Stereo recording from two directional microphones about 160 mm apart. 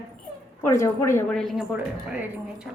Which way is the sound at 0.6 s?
15° left (ahead or behind).